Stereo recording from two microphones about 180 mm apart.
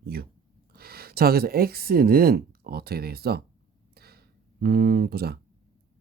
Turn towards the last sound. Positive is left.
turn(degrees=-60)  # may be behind; listen again after turning